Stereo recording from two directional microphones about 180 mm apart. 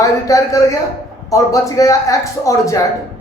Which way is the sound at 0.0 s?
20° left (ahead or behind).